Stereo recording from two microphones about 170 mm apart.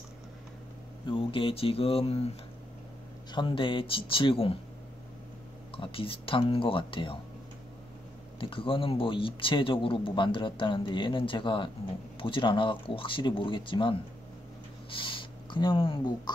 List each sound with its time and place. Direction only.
1.0 s speech: 30° left (ahead or behind)
3.3 s speech: 30° left (ahead or behind)
5.8 s speech: 30° left (ahead or behind)
8.4 s speech: 30° left (ahead or behind)
14.9 s a sound: 30° left (ahead or behind)